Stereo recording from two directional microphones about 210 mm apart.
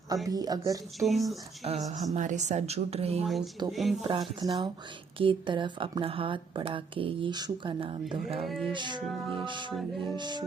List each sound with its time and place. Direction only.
0.3 s speech: 20° right (ahead or behind)
0.9 s speech: centre (ahead or behind)
1.6 s a woman's voice: 30° right (ahead or behind)
3.2 s speech: centre (ahead or behind)
4.0 s speech: 25° right (ahead or behind)
8.4 s speech: centre (ahead or behind)
8.7 s speech: 20° right (ahead or behind)
9.7 s speech: centre (ahead or behind)
10.2 s speech: 20° right (ahead or behind)